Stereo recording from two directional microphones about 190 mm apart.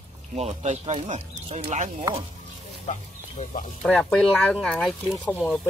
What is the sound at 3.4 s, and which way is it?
Speech, 40° left (ahead or behind).